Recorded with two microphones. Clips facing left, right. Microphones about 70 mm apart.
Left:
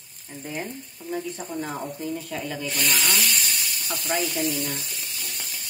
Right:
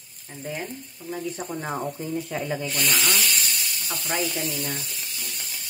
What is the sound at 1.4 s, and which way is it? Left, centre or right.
Speech, right.